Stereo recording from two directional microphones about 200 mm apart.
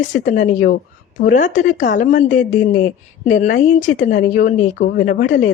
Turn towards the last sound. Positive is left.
turn(degrees=40)  # may be behind; listen again after turning